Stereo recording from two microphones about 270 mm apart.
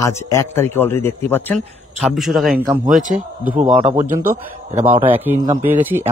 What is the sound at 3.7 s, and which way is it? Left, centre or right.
Speech, right.